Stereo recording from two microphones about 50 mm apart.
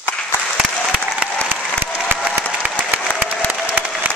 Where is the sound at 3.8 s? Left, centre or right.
Right.